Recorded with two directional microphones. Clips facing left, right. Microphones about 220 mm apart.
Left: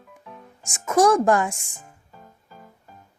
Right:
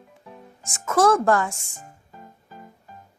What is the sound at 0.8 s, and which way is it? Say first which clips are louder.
Speech: left 1 dB; 15° left (ahead or behind).